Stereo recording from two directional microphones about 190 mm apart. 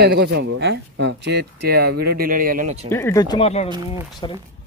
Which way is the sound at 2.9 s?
15° left (ahead or behind).